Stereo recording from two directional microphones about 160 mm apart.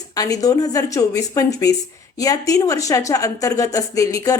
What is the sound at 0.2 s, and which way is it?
A woman's voice, 20° left (ahead or behind).